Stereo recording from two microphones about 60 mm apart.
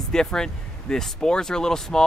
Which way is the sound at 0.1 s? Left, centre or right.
Centre.